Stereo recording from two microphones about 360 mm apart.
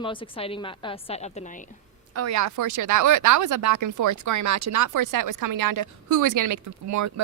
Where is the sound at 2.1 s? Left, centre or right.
Right.